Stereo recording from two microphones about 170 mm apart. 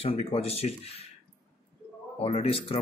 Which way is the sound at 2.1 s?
35° left (ahead or behind).